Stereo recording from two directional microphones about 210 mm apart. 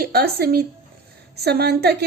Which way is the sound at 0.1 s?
50° right (ahead or behind).